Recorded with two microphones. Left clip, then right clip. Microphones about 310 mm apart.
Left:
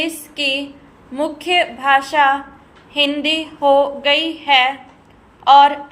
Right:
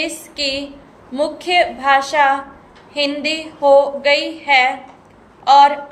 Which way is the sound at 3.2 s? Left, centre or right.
Centre.